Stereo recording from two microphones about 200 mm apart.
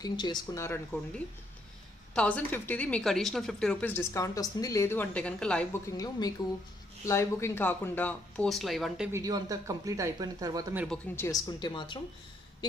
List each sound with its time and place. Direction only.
0.0 s speech: 20° left (ahead or behind); by 9.2 s 5° right (ahead or behind)
9.2 s speech: 15° right (ahead or behind)
10.9 s speech: 15° left (ahead or behind)